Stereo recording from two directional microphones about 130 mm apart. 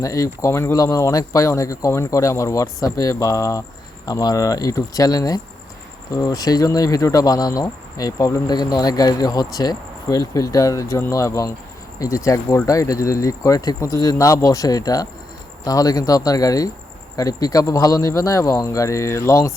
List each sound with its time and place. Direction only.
0.0 s speech: 25° left (ahead or behind)